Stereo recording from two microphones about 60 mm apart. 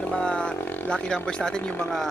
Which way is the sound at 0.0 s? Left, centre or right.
Centre.